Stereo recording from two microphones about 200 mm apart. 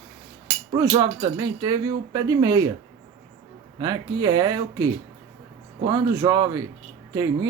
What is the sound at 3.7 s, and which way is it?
Speech, 20° right (ahead or behind).